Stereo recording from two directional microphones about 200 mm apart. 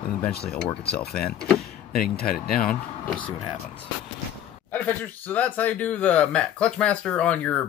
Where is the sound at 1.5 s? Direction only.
50° left (ahead or behind).